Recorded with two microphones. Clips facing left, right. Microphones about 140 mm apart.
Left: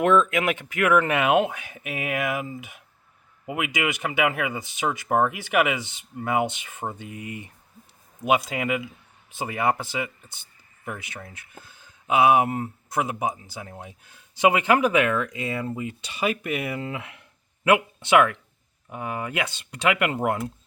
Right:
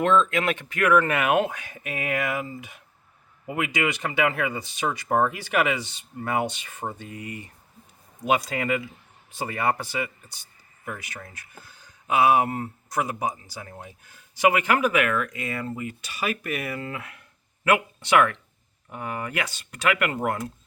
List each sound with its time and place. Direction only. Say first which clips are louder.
0.0 s speech: left 1 dB; 10° left (ahead or behind)